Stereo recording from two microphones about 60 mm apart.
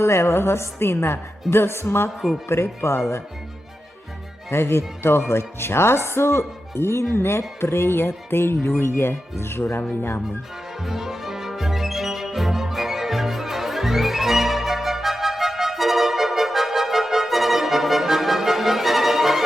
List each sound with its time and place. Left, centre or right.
0.0 s speech: left
4.5 s speech: left
10.8 s music: centre